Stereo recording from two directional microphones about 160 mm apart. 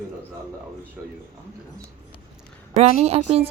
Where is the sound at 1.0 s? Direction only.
10° right (ahead or behind).